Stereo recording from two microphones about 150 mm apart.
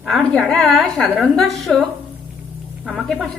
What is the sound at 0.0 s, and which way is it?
A woman's voice, centre (ahead or behind).